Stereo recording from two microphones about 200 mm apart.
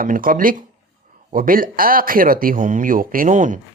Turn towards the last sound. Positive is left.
turn(degrees=-40)  # may be behind; listen again after turning